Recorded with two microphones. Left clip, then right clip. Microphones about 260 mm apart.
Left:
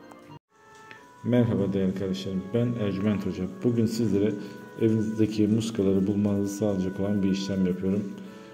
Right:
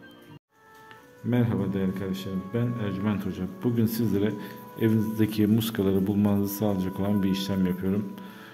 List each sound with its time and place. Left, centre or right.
1.3 s a man's voice: centre